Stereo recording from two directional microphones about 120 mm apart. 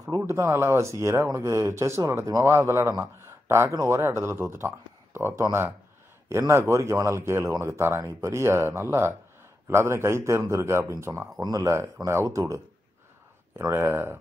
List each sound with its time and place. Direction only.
0.2 s speech: 20° right (ahead or behind)